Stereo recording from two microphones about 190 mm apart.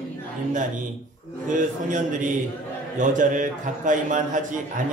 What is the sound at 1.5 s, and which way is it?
A man's voice, 45° right (ahead or behind).